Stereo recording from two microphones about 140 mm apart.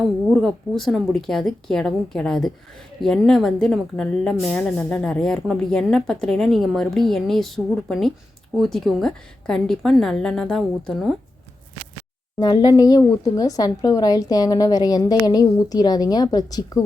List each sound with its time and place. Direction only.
0.3 s a woman's voice: centre (ahead or behind)
12.4 s speech: 30° left (ahead or behind)